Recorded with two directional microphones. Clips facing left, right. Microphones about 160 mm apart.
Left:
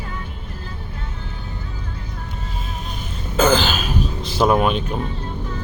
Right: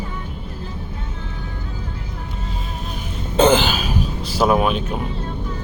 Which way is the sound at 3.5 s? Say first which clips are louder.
Right 1 dB; 10° right (ahead or behind).